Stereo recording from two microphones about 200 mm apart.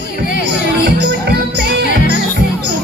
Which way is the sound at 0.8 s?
55° right (ahead or behind).